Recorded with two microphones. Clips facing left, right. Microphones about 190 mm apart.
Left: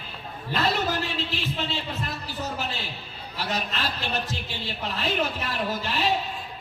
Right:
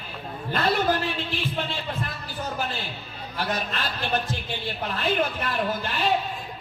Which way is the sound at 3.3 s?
55° right (ahead or behind).